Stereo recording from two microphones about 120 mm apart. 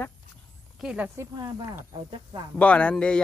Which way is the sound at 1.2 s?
30° right (ahead or behind).